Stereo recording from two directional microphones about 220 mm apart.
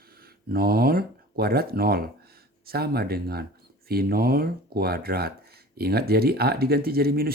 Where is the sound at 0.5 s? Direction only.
45° right (ahead or behind).